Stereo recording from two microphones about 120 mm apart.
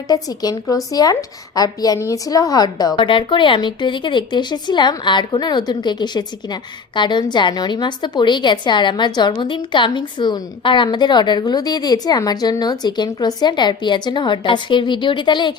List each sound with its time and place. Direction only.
0.1 s a woman's voice: 30° left (ahead or behind)